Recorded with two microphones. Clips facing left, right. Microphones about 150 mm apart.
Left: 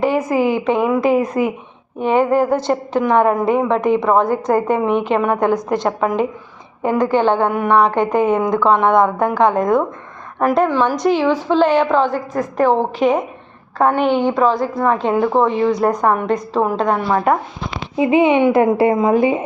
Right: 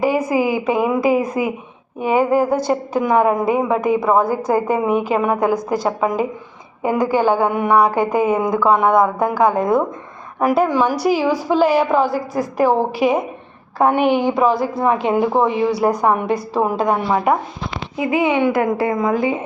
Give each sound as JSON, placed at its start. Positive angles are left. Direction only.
{"t": 0.0, "sound": "a woman's voice", "side_deg": -10}
{"t": 17.9, "sound": "speech", "side_deg": 25}